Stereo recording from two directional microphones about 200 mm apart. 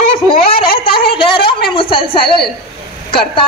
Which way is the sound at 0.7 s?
25° left (ahead or behind).